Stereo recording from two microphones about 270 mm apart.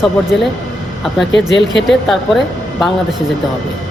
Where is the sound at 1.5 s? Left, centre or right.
Left.